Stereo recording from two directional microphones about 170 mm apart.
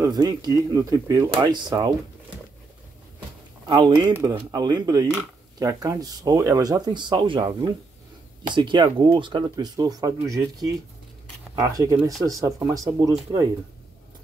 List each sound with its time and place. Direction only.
0.0 s speech: 20° right (ahead or behind)
3.6 s speech: 25° right (ahead or behind)
12.0 s speech: centre (ahead or behind)
12.3 s speech: 20° right (ahead or behind)